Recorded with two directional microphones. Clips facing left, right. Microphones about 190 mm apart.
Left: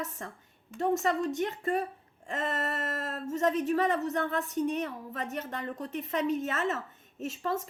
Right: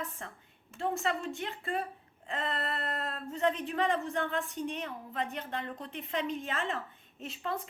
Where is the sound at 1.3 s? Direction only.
40° left (ahead or behind).